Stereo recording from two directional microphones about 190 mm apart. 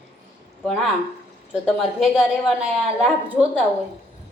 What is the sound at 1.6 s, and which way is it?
A woman's voice, centre (ahead or behind).